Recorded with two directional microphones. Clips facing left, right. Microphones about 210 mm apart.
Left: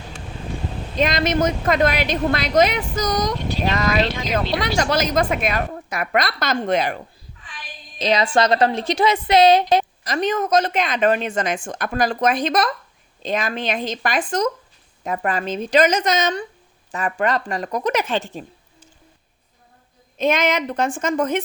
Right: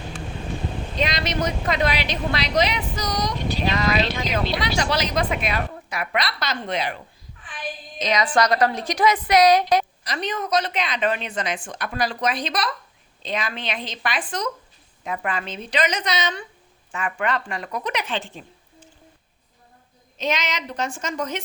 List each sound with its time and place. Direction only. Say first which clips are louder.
0.9 s speech: left 6 dB; 50° left (ahead or behind)
7.9 s a woman's voice: left 3 dB; 30° left (ahead or behind)
10.0 s speech: left 6 dB; 45° left (ahead or behind)
20.1 s speech: left 7 dB; 55° left (ahead or behind)